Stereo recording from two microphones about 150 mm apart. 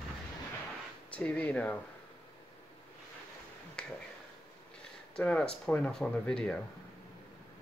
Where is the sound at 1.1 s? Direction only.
10° left (ahead or behind).